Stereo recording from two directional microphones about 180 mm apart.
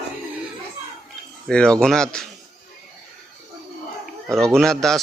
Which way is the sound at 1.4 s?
5° left (ahead or behind).